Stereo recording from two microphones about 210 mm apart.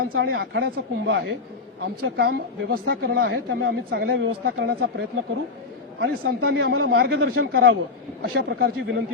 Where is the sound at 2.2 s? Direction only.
50° right (ahead or behind).